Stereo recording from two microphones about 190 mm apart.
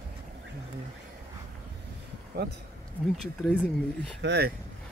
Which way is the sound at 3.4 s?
5° left (ahead or behind).